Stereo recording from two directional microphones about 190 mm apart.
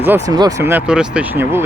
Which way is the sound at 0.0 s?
10° right (ahead or behind).